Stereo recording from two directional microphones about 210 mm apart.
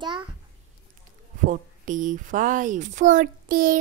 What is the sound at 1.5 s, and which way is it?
Speech, 35° right (ahead or behind).